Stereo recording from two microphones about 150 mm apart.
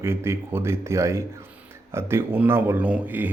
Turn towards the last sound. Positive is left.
turn(degrees=-10)  # may be behind; listen again after turning